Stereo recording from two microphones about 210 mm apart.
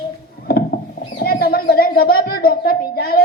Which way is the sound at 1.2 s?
45° left (ahead or behind).